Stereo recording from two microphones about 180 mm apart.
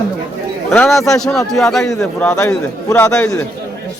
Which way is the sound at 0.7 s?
Centre (ahead or behind).